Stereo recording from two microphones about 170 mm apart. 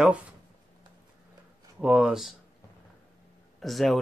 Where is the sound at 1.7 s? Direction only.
5° right (ahead or behind).